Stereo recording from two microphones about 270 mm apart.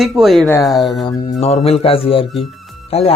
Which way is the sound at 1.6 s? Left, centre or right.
Left.